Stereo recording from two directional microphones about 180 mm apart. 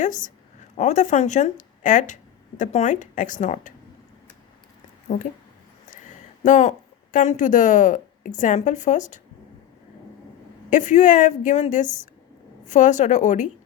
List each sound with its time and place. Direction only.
0.0 s speech: 45° left (ahead or behind)
6.4 s speech: 40° left (ahead or behind)
10.7 s a woman's voice: 45° left (ahead or behind)